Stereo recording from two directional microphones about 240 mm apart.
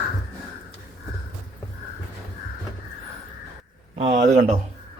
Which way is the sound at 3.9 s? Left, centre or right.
Right.